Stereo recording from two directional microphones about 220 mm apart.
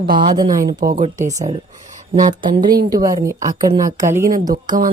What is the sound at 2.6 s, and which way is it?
Speech, 20° right (ahead or behind).